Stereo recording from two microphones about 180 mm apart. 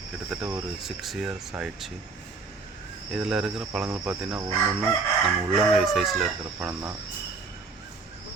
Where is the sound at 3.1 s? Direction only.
5° right (ahead or behind).